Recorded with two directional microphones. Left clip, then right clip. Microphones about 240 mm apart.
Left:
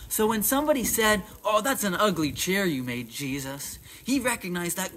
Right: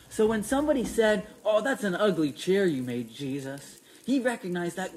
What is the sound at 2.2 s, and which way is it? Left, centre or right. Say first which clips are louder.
Speech: right 1 dB; left.